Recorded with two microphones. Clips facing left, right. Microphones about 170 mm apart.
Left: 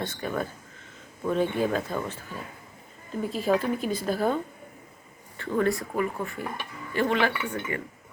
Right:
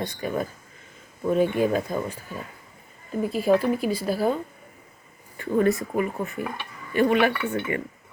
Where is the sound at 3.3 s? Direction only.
10° right (ahead or behind); by 7.8 s 25° right (ahead or behind).